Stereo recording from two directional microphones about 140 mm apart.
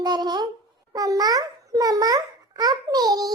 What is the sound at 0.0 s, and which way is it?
A child's voice, 30° right (ahead or behind).